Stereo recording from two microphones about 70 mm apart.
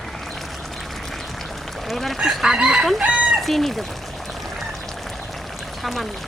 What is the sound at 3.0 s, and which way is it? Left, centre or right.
Speech, centre.